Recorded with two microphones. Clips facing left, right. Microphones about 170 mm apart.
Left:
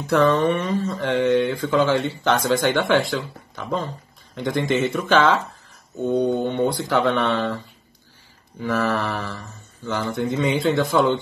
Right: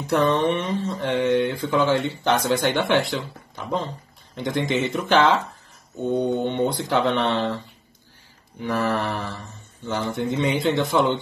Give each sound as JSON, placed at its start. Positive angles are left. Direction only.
{"t": 0.0, "sound": "speech", "side_deg": -20}